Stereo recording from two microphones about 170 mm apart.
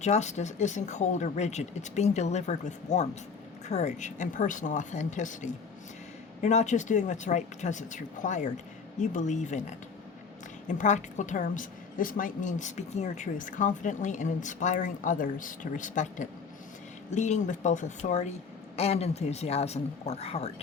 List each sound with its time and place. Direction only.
0.0 s a woman's voice: 45° left (ahead or behind)